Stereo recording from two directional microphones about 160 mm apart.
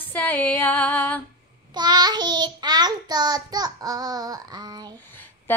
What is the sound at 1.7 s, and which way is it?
Child singing, 25° right (ahead or behind).